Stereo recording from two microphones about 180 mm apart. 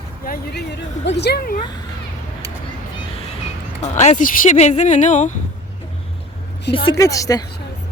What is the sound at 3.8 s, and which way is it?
Speech, 40° left (ahead or behind).